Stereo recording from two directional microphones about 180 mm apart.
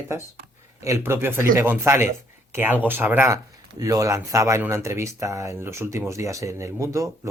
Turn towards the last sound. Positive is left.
turn(degrees=-15)  # may be behind; listen again after turning